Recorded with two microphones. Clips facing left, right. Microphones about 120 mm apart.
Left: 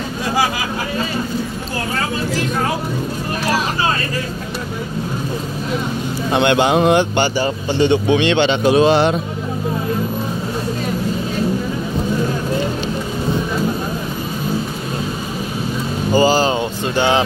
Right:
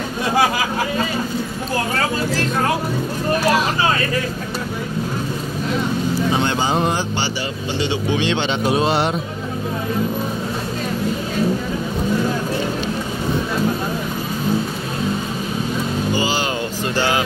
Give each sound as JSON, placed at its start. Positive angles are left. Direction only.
{"t": 6.3, "sound": "speech", "side_deg": 70}
{"t": 16.1, "sound": "speech", "side_deg": 40}
{"t": 16.9, "sound": "speech", "side_deg": 20}